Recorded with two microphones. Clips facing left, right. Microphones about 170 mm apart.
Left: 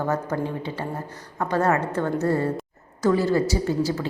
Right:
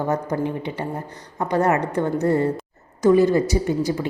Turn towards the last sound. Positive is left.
turn(degrees=-15)  # may be behind; listen again after turning